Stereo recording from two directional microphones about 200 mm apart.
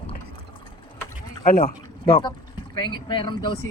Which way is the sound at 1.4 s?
40° left (ahead or behind).